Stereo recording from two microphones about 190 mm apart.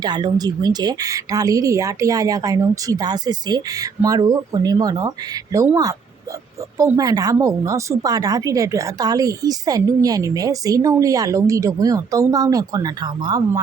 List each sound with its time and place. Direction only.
0.0 s a woman's voice: 20° right (ahead or behind)